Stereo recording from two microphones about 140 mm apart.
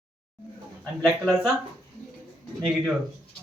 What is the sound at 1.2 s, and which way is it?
Speech, centre (ahead or behind).